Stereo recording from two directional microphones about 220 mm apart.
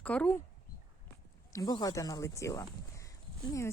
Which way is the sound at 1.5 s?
15° left (ahead or behind).